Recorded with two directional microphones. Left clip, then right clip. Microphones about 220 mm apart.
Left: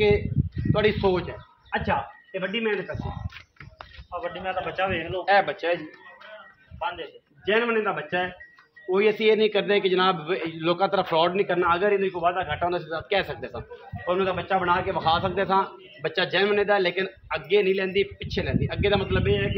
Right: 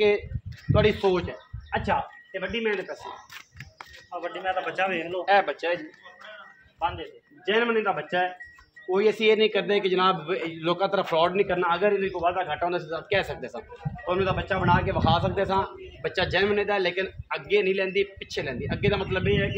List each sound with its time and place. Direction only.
0.7 s a man's voice: 5° left (ahead or behind)
4.1 s a man's voice: 15° right (ahead or behind)
5.2 s speech: 20° left (ahead or behind)
7.4 s a man's voice: 15° left (ahead or behind)